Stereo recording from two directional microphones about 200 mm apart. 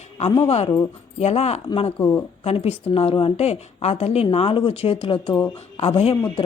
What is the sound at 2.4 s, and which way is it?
A woman's voice, 30° left (ahead or behind).